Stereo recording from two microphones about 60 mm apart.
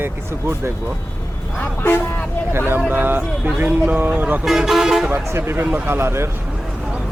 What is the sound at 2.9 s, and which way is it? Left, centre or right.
A man's voice, right.